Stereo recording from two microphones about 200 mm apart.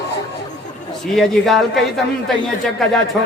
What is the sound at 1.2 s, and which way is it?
Speech, centre (ahead or behind).